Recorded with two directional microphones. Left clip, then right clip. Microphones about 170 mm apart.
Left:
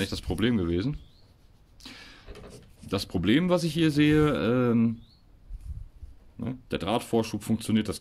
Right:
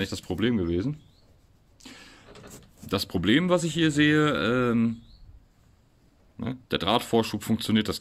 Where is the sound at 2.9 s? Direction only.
Centre (ahead or behind); by 4.9 s 35° left (ahead or behind).